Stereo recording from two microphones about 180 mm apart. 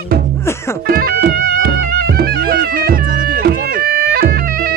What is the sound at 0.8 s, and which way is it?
Music, 55° right (ahead or behind).